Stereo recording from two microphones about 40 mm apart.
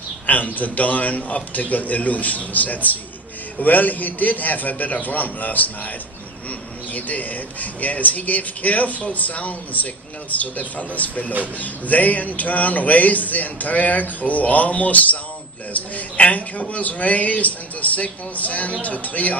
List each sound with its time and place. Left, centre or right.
0.3 s speech: left
6.9 s speech: left